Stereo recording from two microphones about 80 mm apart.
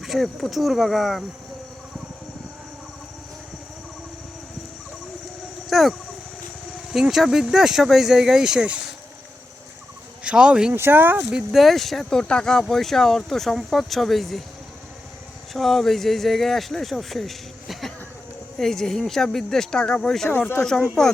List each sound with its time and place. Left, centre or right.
0.0 s speech: centre
5.6 s a sound: centre
7.1 s speech: centre
10.2 s speech: centre
10.8 s speech: right; by 11.6 s centre
11.6 s speech: centre
15.5 s speech: centre